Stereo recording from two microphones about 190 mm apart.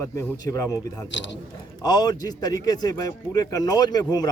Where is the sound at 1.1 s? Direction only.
70° left (ahead or behind).